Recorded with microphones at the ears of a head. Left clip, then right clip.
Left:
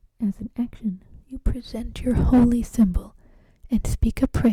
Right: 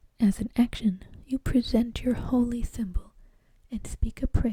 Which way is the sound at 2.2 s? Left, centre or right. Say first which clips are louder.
Left 8 dB; left.